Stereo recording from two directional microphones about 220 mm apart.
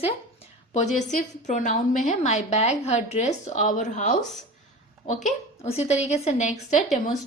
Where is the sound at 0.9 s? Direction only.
35° left (ahead or behind).